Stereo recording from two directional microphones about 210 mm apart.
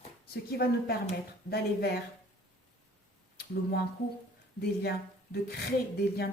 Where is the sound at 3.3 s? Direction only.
50° left (ahead or behind).